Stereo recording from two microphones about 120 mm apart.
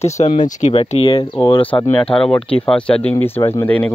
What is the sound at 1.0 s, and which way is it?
Speech, 50° left (ahead or behind).